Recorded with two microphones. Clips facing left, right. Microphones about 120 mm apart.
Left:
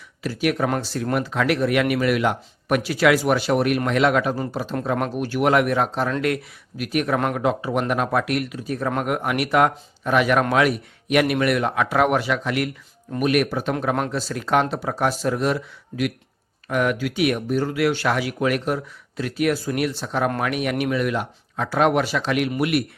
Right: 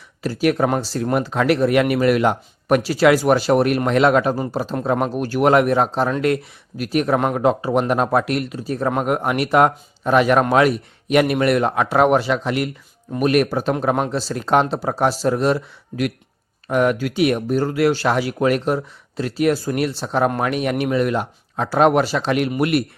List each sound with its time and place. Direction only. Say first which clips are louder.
0.2 s speech: right 4 dB; 35° right (ahead or behind)